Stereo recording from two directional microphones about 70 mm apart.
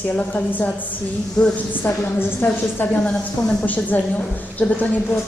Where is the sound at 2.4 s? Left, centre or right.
Left.